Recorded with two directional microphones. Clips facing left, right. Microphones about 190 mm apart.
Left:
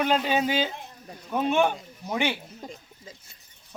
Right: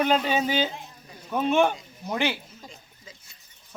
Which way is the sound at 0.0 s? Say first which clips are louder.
Right 1 dB; centre (ahead or behind).